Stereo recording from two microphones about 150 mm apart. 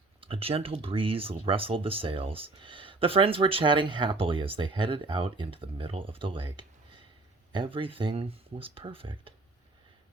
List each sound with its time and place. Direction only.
0.2 s speech: 40° right (ahead or behind)